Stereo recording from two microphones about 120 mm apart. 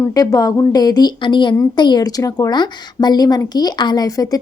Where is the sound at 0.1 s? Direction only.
30° left (ahead or behind).